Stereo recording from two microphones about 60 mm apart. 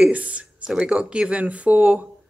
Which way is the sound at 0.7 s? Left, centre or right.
Centre.